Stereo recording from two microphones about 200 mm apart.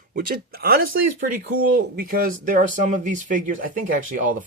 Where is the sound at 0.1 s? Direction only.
45° right (ahead or behind).